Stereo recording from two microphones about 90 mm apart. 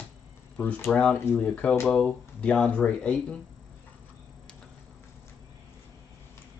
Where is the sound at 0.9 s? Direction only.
10° left (ahead or behind).